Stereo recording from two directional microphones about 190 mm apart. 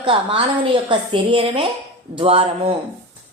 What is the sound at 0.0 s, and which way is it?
A woman's voice, 30° right (ahead or behind).